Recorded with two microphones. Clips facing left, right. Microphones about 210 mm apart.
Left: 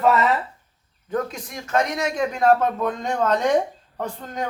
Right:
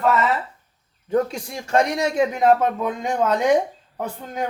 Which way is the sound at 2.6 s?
10° right (ahead or behind).